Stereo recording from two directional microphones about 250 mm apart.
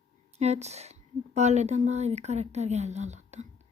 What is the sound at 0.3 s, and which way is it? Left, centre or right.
A woman's voice, right.